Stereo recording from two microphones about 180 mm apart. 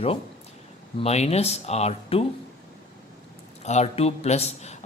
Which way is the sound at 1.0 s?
35° left (ahead or behind).